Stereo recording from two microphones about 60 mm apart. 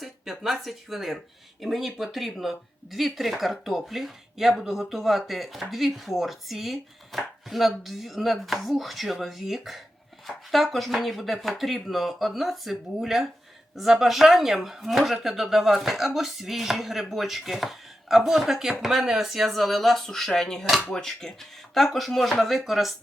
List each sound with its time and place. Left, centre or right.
0.0 s speech: centre